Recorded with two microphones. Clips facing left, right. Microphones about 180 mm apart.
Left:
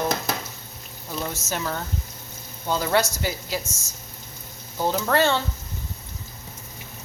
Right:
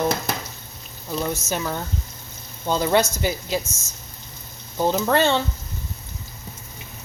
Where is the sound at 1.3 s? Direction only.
15° right (ahead or behind).